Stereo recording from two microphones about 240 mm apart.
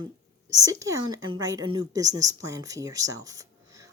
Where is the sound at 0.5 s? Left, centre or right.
Centre.